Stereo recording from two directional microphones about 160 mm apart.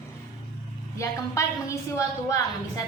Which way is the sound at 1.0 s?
20° left (ahead or behind).